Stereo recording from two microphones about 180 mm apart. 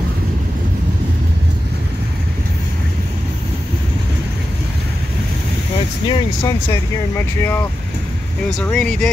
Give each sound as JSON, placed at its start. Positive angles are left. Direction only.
{"t": 6.0, "sound": "speech", "side_deg": 30}
{"t": 6.7, "sound": "speech", "side_deg": 15}
{"t": 8.6, "sound": "speech", "side_deg": 5}